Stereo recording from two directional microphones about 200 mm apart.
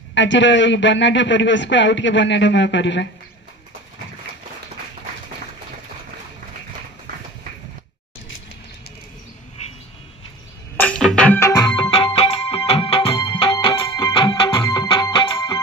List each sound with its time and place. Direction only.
0.1 s speech: 65° left (ahead or behind)
10.8 s music: 5° left (ahead or behind); by 15.6 s 25° left (ahead or behind)